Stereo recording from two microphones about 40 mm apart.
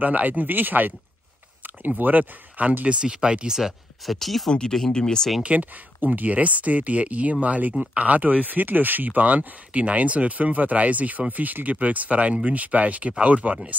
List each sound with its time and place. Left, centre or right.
0.0 s speech: right
2.9 s speech: right
4.0 s speech: centre
4.5 s speech: left
5.4 s speech: right